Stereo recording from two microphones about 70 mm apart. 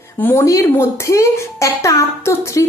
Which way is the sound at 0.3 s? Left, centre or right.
Left.